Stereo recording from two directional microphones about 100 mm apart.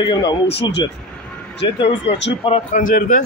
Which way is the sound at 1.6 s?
70° left (ahead or behind).